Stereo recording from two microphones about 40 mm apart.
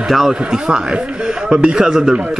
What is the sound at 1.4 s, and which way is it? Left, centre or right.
Speech, centre.